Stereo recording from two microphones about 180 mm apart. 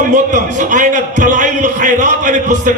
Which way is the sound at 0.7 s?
45° right (ahead or behind).